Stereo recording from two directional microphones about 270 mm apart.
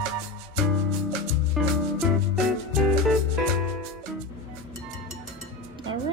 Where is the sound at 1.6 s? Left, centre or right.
Centre.